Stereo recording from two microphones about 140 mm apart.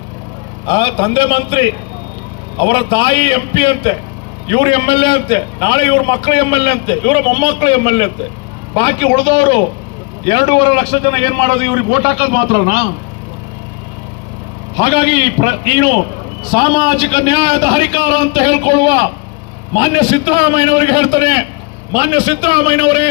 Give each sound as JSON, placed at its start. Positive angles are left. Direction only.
{"t": 0.7, "sound": "a man's voice", "side_deg": 30}
{"t": 11.1, "sound": "a man's voice", "side_deg": -50}
{"t": 12.0, "sound": "a man's voice", "side_deg": 40}
{"t": 14.8, "sound": "a man's voice", "side_deg": 40}